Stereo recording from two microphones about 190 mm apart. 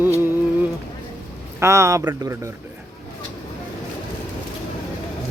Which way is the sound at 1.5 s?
15° right (ahead or behind).